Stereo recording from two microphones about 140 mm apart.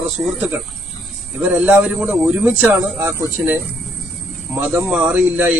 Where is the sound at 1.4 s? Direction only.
5° right (ahead or behind).